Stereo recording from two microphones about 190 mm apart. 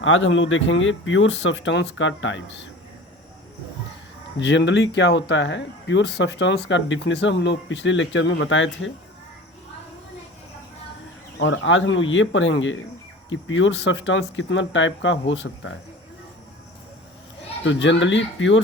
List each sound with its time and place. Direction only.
0.0 s speech: 90° left
4.4 s speech: 70° left (ahead or behind); by 8.9 s 90° left
11.3 s speech: 80° left
17.6 s speech: 75° left (ahead or behind)